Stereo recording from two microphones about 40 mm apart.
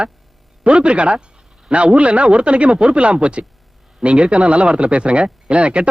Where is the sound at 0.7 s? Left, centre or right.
Right.